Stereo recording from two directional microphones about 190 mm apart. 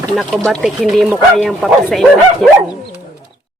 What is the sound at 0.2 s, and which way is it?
Speech, centre (ahead or behind).